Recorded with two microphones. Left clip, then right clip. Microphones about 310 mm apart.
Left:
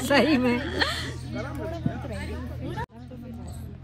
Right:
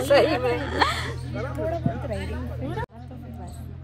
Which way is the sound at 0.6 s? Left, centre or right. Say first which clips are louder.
Right 4 dB; right.